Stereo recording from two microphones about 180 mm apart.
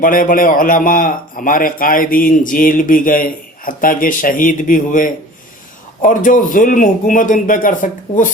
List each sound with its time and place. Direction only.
0.0 s a man's voice: 50° left (ahead or behind)